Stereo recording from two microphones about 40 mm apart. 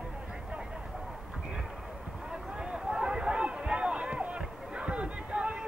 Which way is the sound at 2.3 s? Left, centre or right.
Right.